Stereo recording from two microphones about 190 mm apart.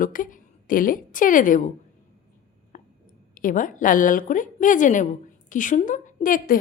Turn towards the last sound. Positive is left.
turn(degrees=45)  # may be behind; listen again after turning